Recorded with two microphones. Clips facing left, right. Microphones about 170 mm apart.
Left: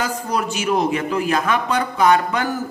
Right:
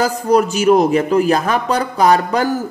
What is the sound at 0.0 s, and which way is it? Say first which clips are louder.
A man's voice: right 8 dB; 40° right (ahead or behind).